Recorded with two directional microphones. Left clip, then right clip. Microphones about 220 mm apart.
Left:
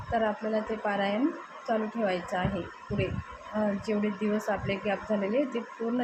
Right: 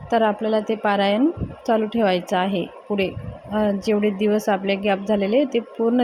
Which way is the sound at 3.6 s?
40° right (ahead or behind).